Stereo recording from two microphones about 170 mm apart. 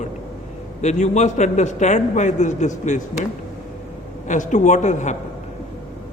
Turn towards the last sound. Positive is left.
turn(degrees=45)  # may be behind; listen again after turning